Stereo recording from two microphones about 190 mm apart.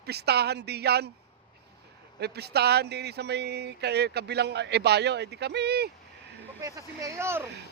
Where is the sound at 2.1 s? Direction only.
60° right (ahead or behind).